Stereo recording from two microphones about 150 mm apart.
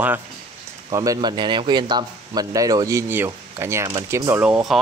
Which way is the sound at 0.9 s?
20° right (ahead or behind).